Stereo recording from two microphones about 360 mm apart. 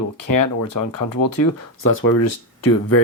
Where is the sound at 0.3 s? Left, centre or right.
Left.